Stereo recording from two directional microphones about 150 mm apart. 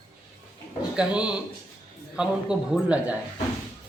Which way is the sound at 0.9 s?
5° right (ahead or behind).